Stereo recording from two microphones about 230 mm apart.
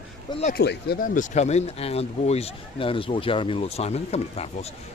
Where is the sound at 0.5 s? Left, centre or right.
Left.